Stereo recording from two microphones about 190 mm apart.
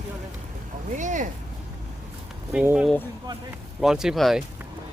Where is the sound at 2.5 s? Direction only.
5° right (ahead or behind).